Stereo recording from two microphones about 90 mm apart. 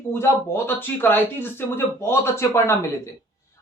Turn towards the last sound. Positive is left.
turn(degrees=30)  # may be behind; listen again after turning